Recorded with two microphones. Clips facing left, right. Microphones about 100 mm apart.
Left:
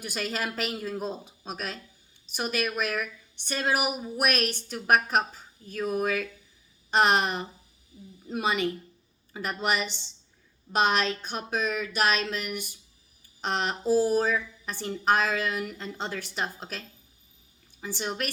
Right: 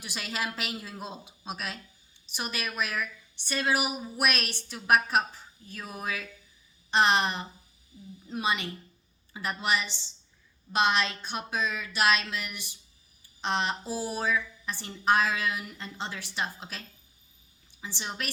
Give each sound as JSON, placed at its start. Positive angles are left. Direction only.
{"t": 0.0, "sound": "a woman's voice", "side_deg": 45}
{"t": 17.8, "sound": "a woman's voice", "side_deg": 50}